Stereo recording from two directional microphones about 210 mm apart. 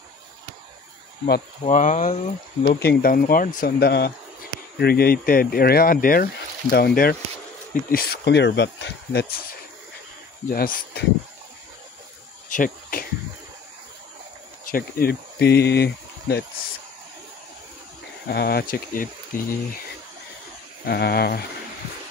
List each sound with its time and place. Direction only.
1.2 s speech: 40° left (ahead or behind)
2.6 s speech: 50° left (ahead or behind)
10.5 s speech: 45° left (ahead or behind)
12.4 s cricket: 40° left (ahead or behind)
14.7 s speech: 45° left (ahead or behind)
18.3 s speech: 50° left (ahead or behind)
20.8 s speech: 50° left (ahead or behind)